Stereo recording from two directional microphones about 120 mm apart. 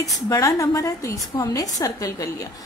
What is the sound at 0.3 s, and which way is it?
A woman's voice, 25° left (ahead or behind).